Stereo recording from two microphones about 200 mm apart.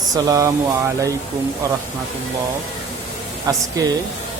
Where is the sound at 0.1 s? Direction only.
15° right (ahead or behind).